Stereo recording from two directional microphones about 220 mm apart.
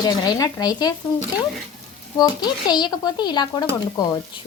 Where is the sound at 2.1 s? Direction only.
20° left (ahead or behind).